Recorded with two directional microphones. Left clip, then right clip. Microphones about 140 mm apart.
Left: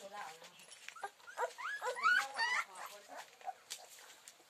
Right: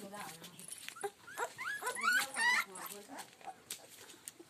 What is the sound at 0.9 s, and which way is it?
Dog, 90° right.